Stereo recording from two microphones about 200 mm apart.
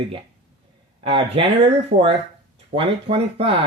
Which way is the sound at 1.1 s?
30° right (ahead or behind).